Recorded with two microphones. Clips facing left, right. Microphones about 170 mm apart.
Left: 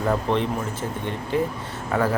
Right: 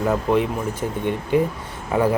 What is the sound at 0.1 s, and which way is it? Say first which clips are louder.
Speech: right 2 dB; 10° right (ahead or behind).